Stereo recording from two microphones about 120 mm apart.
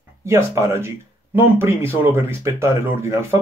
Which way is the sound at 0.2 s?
25° right (ahead or behind).